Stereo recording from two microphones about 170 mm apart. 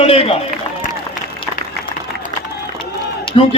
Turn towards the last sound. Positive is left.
turn(degrees=30)  # may be behind; listen again after turning